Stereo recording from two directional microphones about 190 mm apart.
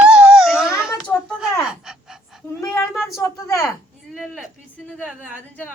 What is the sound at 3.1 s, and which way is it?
Speech, 15° left (ahead or behind).